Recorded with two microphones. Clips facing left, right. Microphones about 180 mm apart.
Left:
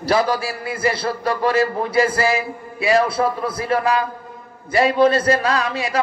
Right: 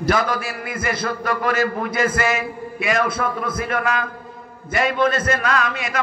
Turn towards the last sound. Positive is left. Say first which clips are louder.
# left 2 dB
turn(degrees=30)  # may be behind; listen again after turning